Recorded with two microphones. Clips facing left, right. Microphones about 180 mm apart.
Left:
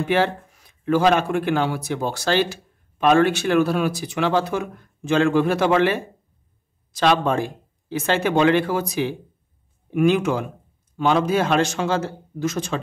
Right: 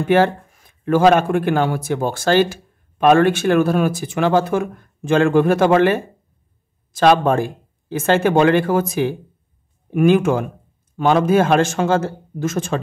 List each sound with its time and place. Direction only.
0.1 s speech: 50° right (ahead or behind)